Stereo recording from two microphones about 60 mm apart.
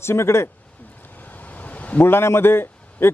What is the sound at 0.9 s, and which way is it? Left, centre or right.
Vehicle, left.